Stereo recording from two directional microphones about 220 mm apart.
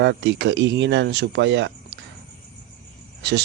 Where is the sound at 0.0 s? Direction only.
55° right (ahead or behind).